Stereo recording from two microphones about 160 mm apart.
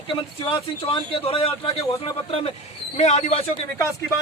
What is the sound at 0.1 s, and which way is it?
Speech, 35° left (ahead or behind).